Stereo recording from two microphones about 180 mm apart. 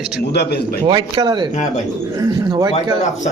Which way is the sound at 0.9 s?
25° right (ahead or behind).